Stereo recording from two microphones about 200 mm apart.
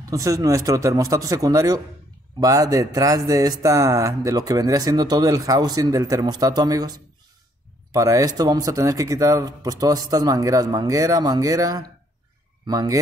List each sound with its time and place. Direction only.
0.0 s speech: 15° right (ahead or behind)